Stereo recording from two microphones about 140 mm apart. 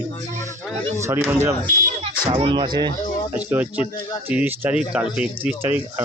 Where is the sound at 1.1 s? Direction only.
15° right (ahead or behind).